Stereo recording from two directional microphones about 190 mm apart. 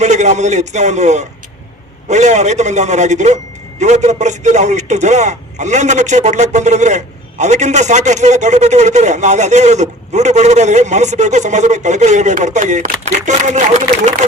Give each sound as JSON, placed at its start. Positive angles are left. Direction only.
{"t": 0.0, "sound": "speech", "side_deg": -40}